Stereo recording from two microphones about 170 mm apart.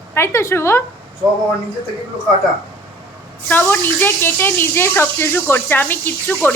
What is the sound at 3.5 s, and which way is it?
Speech, 10° left (ahead or behind).